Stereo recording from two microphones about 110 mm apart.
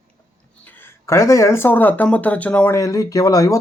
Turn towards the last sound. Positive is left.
turn(degrees=35)  # may be behind; listen again after turning